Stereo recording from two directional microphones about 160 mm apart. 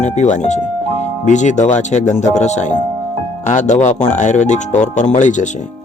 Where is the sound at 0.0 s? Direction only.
50° left (ahead or behind).